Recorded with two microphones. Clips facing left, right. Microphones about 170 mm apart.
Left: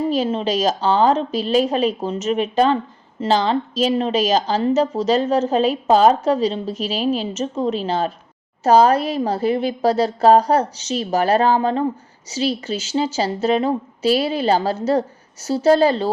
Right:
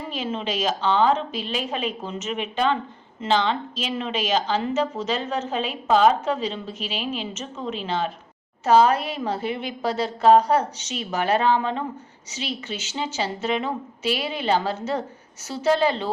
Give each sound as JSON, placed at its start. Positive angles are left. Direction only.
{"t": 0.1, "sound": "a woman's voice", "side_deg": 35}